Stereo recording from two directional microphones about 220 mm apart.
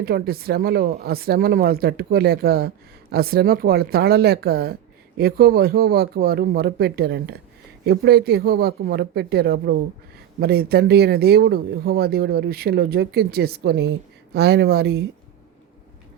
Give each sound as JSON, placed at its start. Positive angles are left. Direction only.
{"t": 0.0, "sound": "speech", "side_deg": -45}